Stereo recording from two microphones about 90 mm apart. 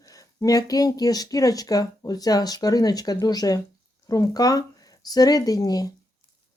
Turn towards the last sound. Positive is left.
turn(degrees=45)  # may be behind; listen again after turning